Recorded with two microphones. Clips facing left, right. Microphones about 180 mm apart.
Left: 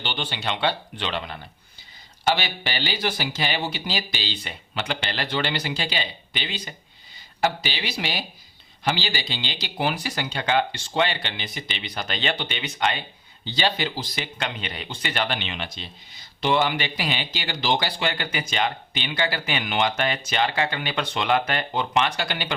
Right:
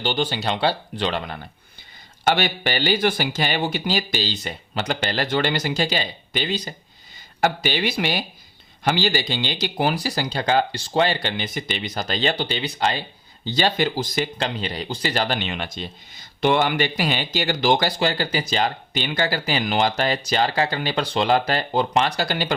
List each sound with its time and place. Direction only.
0.0 s speech: 40° right (ahead or behind)
7.4 s speech: 50° right (ahead or behind)
14.3 s speech: 35° right (ahead or behind)